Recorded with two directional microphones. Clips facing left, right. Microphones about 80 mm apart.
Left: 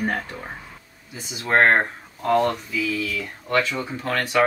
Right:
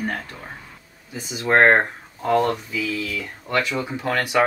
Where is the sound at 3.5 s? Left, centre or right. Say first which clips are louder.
Even; centre.